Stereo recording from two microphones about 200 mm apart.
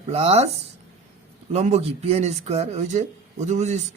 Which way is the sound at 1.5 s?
35° right (ahead or behind).